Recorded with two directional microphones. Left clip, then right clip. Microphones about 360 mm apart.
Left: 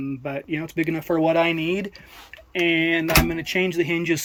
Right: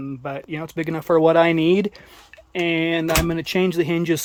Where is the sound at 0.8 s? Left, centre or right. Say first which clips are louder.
Right 5 dB; centre.